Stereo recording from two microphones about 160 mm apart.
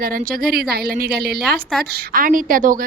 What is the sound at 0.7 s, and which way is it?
A woman's voice, 75° right (ahead or behind).